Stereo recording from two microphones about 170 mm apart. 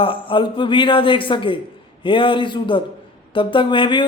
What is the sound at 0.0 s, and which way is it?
Speech, 30° left (ahead or behind).